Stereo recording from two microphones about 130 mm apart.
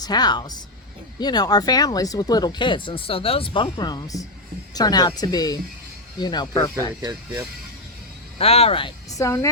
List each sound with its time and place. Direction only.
0.0 s speech: 30° left (ahead or behind)
7.0 s speech: 35° right (ahead or behind)
8.4 s speech: 50° left (ahead or behind)
9.1 s a woman's voice: 25° left (ahead or behind)